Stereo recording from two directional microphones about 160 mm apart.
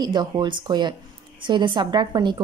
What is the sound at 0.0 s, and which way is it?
A woman's voice, 25° right (ahead or behind).